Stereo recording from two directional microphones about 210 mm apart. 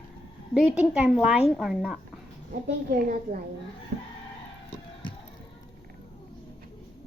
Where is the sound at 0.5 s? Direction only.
5° right (ahead or behind).